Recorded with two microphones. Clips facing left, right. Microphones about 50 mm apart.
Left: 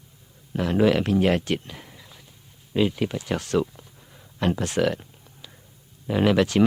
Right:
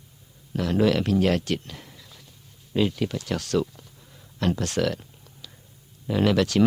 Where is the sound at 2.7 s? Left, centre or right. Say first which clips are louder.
Left 1 dB; centre.